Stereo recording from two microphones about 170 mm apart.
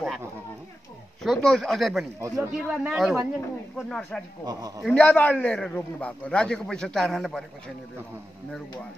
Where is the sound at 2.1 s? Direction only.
20° right (ahead or behind).